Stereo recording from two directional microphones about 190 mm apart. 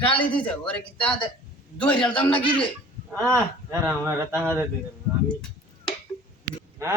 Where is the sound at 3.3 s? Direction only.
15° right (ahead or behind).